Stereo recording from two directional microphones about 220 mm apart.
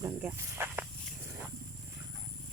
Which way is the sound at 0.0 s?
10° right (ahead or behind).